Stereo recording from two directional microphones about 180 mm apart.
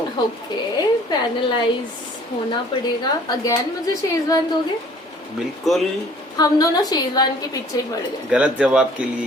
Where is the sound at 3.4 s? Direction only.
20° left (ahead or behind).